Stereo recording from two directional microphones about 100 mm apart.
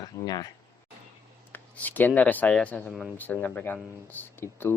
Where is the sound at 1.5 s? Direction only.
20° left (ahead or behind).